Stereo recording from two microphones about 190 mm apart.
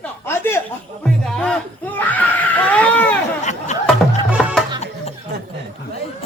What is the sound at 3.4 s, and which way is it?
Chatter, 40° left (ahead or behind).